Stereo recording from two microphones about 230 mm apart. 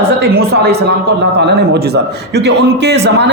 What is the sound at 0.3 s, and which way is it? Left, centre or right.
A man's voice, right.